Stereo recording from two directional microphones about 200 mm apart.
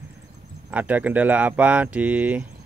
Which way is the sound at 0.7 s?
10° right (ahead or behind).